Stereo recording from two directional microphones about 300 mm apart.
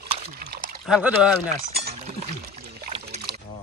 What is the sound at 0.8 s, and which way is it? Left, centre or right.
Speech, centre.